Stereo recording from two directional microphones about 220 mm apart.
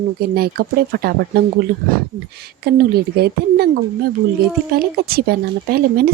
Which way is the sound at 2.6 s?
45° right (ahead or behind).